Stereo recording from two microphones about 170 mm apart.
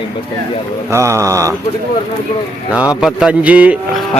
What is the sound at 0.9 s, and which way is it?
Mantra, 15° right (ahead or behind).